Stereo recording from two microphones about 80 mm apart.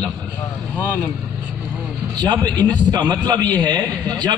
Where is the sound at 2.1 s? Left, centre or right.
Right.